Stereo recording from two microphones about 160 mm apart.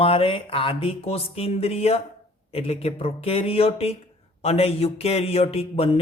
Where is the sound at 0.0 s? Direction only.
35° left (ahead or behind).